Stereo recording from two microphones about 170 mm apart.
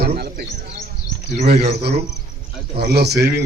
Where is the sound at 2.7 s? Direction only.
70° right (ahead or behind).